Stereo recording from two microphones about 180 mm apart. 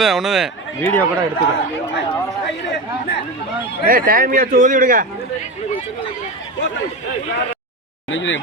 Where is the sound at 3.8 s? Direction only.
55° right (ahead or behind).